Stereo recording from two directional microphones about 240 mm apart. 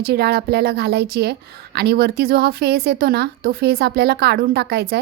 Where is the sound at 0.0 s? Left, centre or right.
Right.